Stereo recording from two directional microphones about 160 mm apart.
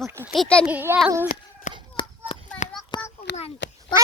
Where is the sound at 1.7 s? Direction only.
50° left (ahead or behind).